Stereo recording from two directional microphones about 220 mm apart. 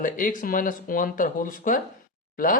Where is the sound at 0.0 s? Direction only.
40° left (ahead or behind).